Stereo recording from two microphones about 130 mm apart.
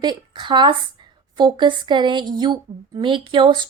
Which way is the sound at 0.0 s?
35° right (ahead or behind).